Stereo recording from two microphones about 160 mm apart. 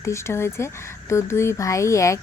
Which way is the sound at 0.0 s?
15° left (ahead or behind).